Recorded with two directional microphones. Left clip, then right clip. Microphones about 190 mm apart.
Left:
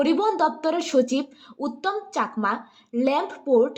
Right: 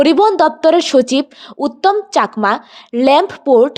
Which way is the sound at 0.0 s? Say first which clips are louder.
Right 11 dB; 40° right (ahead or behind).